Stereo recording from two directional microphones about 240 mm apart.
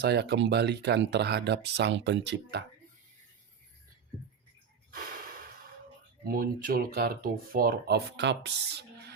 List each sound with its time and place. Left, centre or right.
0.0 s speech: right
6.2 s speech: right